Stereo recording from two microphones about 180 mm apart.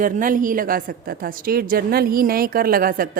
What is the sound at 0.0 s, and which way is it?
A woman's voice, 50° right (ahead or behind).